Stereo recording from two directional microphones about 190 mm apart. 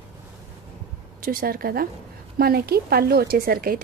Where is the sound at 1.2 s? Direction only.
50° right (ahead or behind).